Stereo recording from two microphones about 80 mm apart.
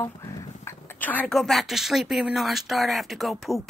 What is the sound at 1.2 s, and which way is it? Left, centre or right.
Speech, centre.